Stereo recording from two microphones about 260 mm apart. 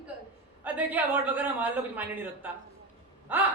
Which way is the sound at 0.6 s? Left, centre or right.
Centre.